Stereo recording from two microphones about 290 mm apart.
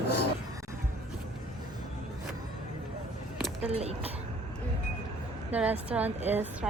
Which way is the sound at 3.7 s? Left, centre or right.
Right.